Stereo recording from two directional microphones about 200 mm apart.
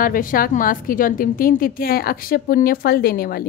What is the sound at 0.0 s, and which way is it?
A woman's voice, 45° left (ahead or behind).